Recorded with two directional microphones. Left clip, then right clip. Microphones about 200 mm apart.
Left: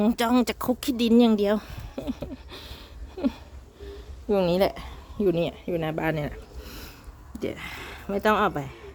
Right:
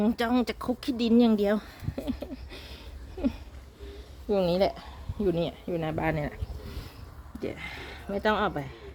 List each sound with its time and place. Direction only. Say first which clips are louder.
0.0 s speech: left 4 dB; 15° left (ahead or behind)